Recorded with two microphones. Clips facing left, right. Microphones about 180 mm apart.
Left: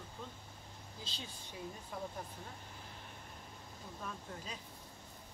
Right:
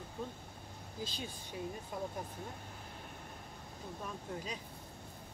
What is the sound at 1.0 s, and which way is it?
Speech, 10° right (ahead or behind).